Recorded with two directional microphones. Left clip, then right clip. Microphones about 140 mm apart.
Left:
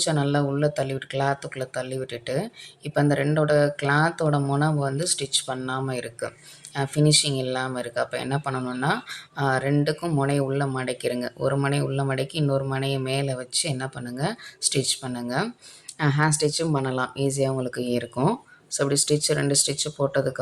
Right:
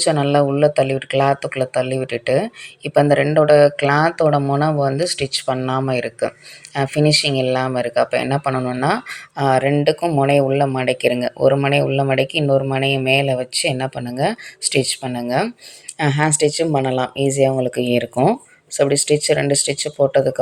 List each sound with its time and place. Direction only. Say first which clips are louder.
0.0 s speech: right 9 dB; 20° right (ahead or behind)